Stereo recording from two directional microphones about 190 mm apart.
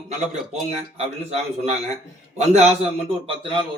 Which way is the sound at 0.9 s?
35° right (ahead or behind).